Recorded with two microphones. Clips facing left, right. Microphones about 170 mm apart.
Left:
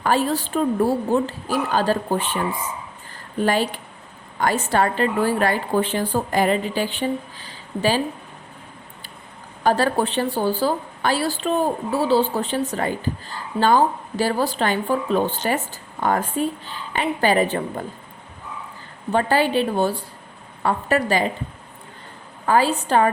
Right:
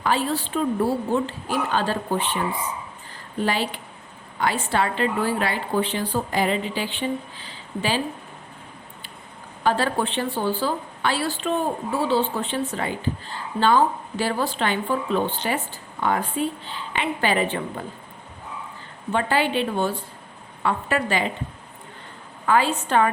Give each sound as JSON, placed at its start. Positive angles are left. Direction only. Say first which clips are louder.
{"t": 0.0, "sound": "a woman's voice", "louder": "left 3 dB", "side_deg": 45}
{"t": 3.4, "sound": "a woman's voice", "louder": "left 4 dB", "side_deg": 45}
{"t": 9.6, "sound": "a woman's voice", "louder": "left 3 dB", "side_deg": 40}
{"t": 19.1, "sound": "a woman's voice", "louder": "left 3 dB", "side_deg": 40}
{"t": 22.4, "sound": "a woman's voice", "louder": "left 2 dB", "side_deg": 35}